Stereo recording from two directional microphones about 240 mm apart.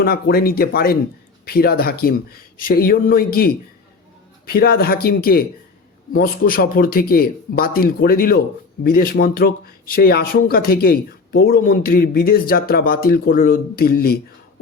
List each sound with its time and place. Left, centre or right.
0.0 s speech: left